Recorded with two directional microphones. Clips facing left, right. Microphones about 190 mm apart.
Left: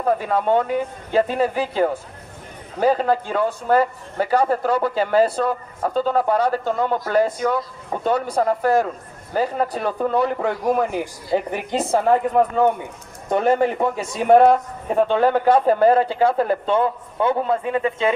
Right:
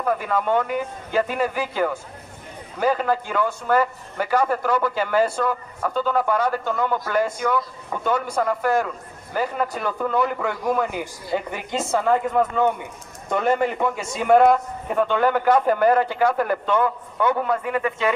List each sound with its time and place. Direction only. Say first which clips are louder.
0.0 s a man's voice: left 3 dB; 30° left (ahead or behind)